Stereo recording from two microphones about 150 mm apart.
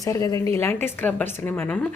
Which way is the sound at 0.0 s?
20° left (ahead or behind).